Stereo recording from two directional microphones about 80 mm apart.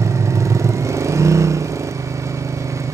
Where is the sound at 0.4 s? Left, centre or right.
Right.